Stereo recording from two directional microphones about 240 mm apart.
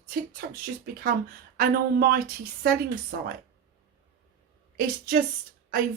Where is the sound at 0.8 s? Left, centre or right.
Right.